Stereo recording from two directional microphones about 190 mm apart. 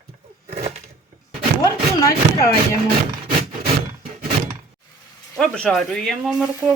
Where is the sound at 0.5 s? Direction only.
35° right (ahead or behind).